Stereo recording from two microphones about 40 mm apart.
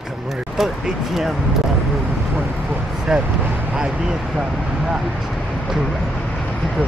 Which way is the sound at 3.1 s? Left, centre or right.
Centre.